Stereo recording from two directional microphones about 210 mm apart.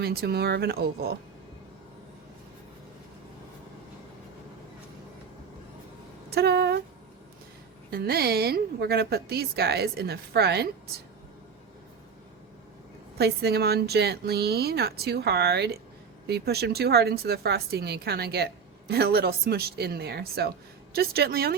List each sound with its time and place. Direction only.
0.0 s speech: 50° right (ahead or behind)
6.3 s speech: 50° right (ahead or behind)
7.9 s speech: 50° right (ahead or behind)
13.1 s speech: 50° right (ahead or behind)